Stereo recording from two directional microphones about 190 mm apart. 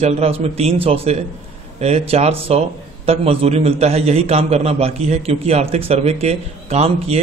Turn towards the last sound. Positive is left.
turn(degrees=-35)  # may be behind; listen again after turning